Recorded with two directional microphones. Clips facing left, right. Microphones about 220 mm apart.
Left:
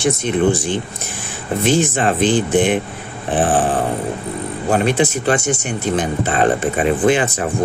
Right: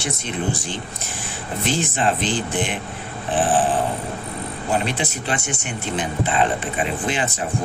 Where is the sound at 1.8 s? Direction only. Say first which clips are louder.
Left 6 dB; 55° left (ahead or behind).